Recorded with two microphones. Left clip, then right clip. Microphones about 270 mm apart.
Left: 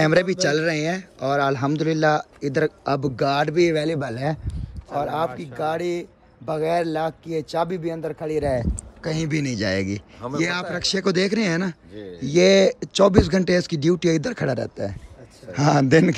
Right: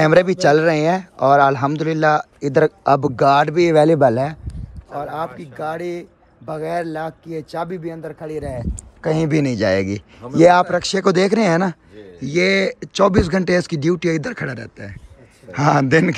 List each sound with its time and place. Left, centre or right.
0.0 s speech: centre
3.9 s speech: left
4.5 s speech: centre